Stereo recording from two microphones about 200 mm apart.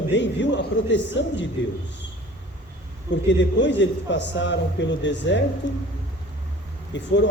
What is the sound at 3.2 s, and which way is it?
A man's voice, 60° left (ahead or behind).